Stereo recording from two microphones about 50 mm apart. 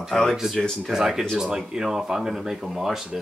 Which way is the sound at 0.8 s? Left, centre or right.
Centre.